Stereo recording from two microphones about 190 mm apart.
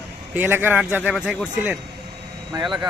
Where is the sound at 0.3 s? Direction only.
10° right (ahead or behind).